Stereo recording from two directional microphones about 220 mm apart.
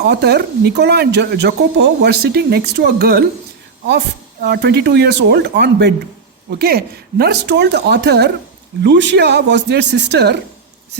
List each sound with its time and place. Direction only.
0.0 s speech: 50° right (ahead or behind)